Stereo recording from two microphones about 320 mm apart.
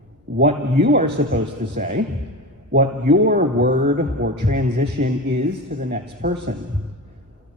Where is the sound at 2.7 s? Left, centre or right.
Right.